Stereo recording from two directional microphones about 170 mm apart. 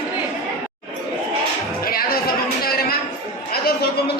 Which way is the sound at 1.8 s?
60° left (ahead or behind).